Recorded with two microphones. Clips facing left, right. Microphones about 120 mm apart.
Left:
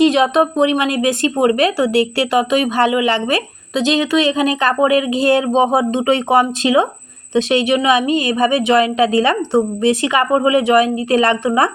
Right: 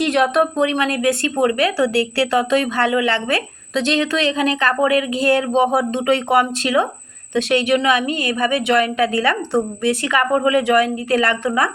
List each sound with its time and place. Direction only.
0.0 s a woman's voice: 20° left (ahead or behind)